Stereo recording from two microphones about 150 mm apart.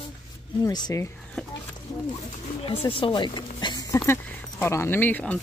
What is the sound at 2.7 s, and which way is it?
Speech, 40° left (ahead or behind).